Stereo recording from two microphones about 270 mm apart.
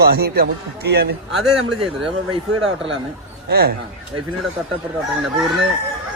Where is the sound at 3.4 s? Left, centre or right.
Right.